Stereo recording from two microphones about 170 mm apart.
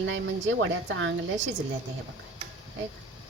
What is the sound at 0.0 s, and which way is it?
Speech, 90° right.